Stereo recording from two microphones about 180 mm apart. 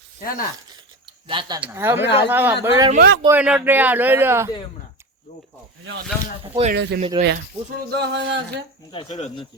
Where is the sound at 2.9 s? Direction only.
60° right (ahead or behind).